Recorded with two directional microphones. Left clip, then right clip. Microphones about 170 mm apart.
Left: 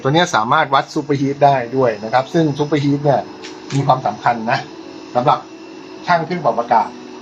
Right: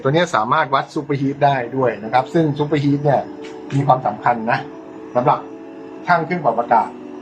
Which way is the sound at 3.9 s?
30° left (ahead or behind).